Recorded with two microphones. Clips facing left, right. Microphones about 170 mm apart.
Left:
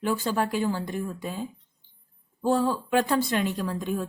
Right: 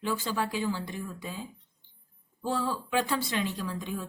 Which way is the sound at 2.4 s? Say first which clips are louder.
Left 7 dB; 45° left (ahead or behind).